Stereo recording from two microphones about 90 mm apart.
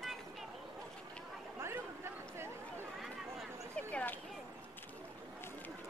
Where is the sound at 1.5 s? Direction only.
30° right (ahead or behind).